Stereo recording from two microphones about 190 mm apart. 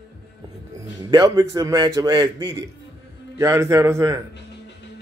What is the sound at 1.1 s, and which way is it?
A man's voice, 20° right (ahead or behind).